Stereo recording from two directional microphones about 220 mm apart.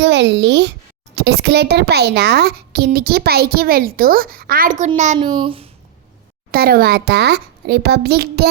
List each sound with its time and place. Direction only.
0.0 s a child's voice: 50° right (ahead or behind)
4.9 s speech: 25° right (ahead or behind)
6.5 s a child's voice: 40° right (ahead or behind)